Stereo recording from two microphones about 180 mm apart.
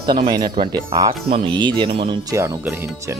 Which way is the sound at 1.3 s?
35° right (ahead or behind).